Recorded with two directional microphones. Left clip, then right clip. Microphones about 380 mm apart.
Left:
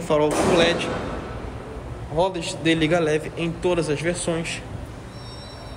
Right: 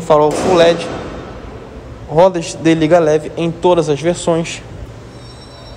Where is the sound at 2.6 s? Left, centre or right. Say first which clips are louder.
Right 10 dB; centre.